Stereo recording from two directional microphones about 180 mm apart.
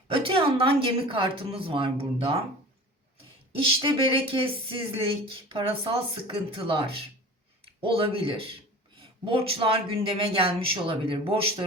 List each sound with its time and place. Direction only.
0.1 s speech: 30° right (ahead or behind)
3.5 s speech: 30° right (ahead or behind)